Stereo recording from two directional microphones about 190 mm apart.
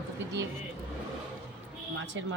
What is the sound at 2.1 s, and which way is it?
Speech, 80° right.